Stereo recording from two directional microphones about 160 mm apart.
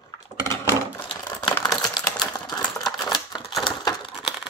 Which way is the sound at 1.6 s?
25° left (ahead or behind).